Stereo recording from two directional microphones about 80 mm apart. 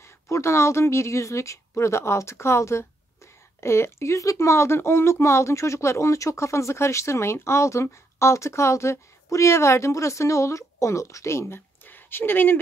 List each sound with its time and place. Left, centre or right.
0.0 s speech: left